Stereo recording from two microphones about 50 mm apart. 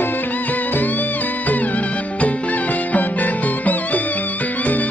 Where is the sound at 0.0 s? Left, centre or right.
Left.